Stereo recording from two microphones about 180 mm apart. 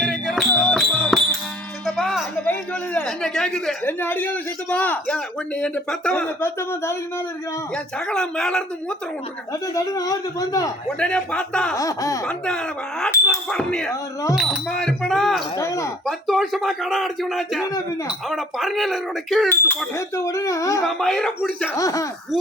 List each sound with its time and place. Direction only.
0.0 s music: centre (ahead or behind)
2.0 s speech: 5° left (ahead or behind)
7.9 s speech: 5° left (ahead or behind)
9.5 s speech: 20° left (ahead or behind)
10.8 s speech: 5° left (ahead or behind)
11.8 s speech: 20° left (ahead or behind)
12.2 s speech: 5° left (ahead or behind)
15.5 s speech: 15° left (ahead or behind)
16.0 s speech: centre (ahead or behind)
19.5 s speech: 15° left (ahead or behind)
20.8 s speech: centre (ahead or behind)
21.8 s speech: 20° left (ahead or behind)